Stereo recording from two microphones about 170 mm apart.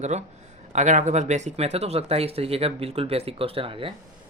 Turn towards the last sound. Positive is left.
turn(degrees=-30)  # may be behind; listen again after turning